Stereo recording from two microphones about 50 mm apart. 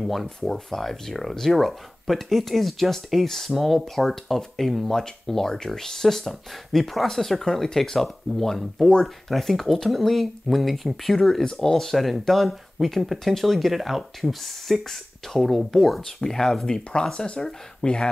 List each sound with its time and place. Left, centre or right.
0.0 s speech: centre